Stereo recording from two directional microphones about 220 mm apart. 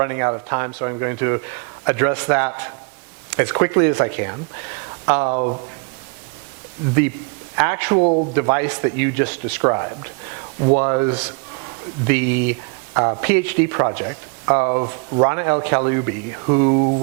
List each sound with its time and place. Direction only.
0.0 s a man's voice: 20° right (ahead or behind)
5.2 s speech: 30° right (ahead or behind)
7.5 s a man's voice: 15° right (ahead or behind)
8.0 s speech: 35° right (ahead or behind)
8.4 s a man's voice: 15° right (ahead or behind)